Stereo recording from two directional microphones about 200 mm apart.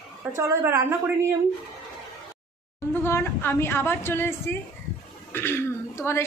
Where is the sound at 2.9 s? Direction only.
10° left (ahead or behind).